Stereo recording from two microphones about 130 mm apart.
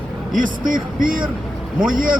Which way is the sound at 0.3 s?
90° right.